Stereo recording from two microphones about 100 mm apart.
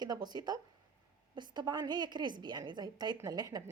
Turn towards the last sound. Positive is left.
turn(degrees=-40)  # may be behind; listen again after turning